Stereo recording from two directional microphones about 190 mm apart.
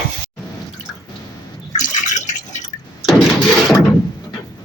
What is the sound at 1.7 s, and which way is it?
Drip, 40° left (ahead or behind).